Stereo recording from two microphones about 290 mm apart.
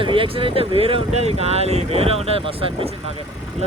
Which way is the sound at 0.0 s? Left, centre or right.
Centre.